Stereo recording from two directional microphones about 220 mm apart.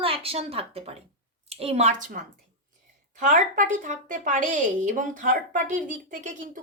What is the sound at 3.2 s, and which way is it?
A woman's voice, 35° right (ahead or behind).